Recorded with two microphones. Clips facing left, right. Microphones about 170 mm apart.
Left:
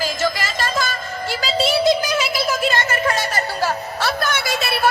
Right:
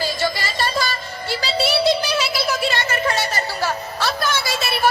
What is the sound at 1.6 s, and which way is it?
Child singing, 45° left (ahead or behind).